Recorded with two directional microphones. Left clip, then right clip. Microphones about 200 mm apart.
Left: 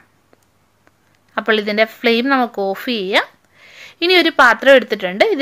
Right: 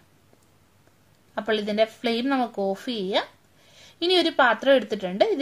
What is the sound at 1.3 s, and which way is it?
Speech, 20° left (ahead or behind).